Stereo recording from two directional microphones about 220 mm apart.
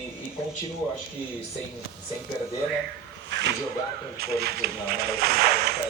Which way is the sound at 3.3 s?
55° right (ahead or behind).